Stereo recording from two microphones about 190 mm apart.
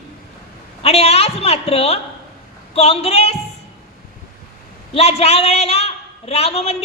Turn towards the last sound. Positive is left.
turn(degrees=35)  # may be behind; listen again after turning